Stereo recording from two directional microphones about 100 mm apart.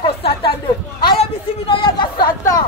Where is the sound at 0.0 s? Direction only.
60° left (ahead or behind).